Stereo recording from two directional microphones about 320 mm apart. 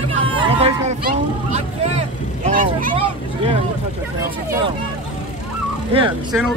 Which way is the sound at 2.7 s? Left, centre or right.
Right.